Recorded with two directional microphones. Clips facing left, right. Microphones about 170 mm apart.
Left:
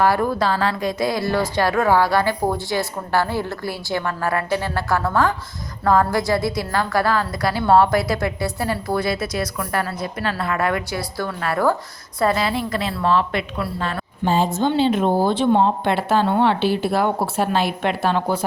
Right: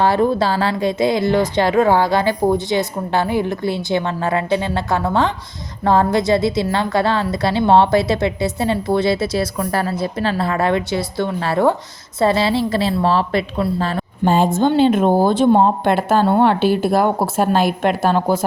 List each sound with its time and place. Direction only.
0.0 s a woman's voice: 25° right (ahead or behind)
14.3 s a woman's voice: 55° right (ahead or behind)